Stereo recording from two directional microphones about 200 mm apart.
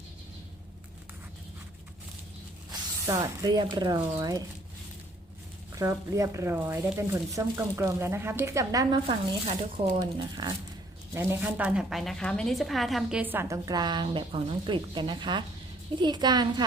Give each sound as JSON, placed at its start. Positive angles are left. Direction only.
{"t": 3.1, "sound": "speech", "side_deg": -20}
{"t": 5.7, "sound": "a woman's voice", "side_deg": -15}
{"t": 10.0, "sound": "a woman's voice", "side_deg": -20}